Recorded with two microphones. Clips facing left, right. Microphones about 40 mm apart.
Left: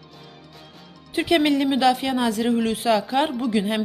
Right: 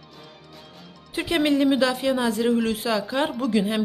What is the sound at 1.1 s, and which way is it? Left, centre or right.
Speech, left.